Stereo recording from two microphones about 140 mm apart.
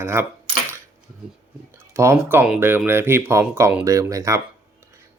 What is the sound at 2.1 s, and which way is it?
Speech, 15° right (ahead or behind).